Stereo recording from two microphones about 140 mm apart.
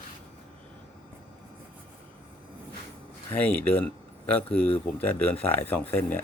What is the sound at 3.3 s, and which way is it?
Speech, 10° left (ahead or behind).